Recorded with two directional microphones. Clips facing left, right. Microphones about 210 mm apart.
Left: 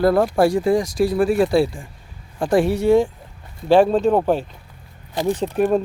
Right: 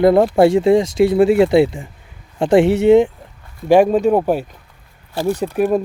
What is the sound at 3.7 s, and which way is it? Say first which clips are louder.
Speech: right 2 dB; 10° right (ahead or behind).